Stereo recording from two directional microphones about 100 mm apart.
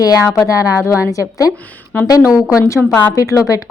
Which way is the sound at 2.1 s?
35° left (ahead or behind).